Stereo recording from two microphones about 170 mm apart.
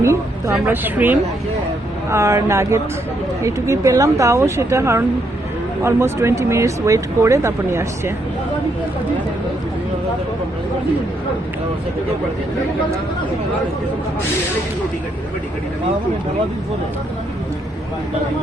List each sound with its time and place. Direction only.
0.0 s speech: 15° right (ahead or behind)